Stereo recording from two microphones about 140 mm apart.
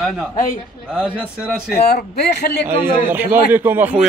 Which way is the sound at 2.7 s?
15° right (ahead or behind).